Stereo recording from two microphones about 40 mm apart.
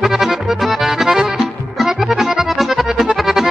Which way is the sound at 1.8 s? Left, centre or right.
Centre.